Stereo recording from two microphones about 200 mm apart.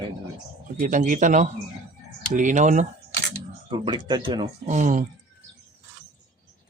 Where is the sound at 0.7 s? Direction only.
40° right (ahead or behind).